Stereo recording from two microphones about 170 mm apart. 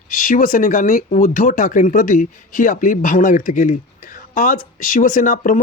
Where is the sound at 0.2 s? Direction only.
55° left (ahead or behind).